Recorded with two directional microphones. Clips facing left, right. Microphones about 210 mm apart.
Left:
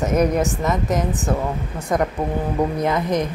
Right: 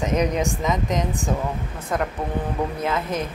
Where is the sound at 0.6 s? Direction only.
5° left (ahead or behind).